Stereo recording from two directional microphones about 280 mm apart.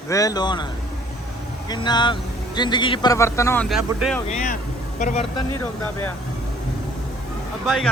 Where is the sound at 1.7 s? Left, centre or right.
Centre.